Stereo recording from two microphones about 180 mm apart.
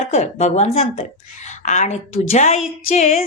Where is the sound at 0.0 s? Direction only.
40° left (ahead or behind).